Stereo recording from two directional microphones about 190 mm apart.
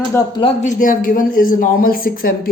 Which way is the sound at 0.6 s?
45° left (ahead or behind).